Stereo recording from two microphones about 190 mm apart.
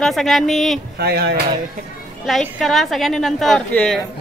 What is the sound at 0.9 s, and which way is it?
Speech, 55° right (ahead or behind).